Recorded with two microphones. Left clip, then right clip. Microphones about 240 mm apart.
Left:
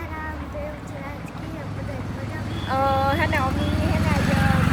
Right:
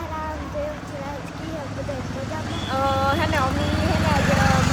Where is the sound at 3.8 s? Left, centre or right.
Right.